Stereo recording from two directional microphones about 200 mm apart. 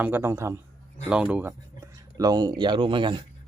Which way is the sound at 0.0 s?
10° right (ahead or behind).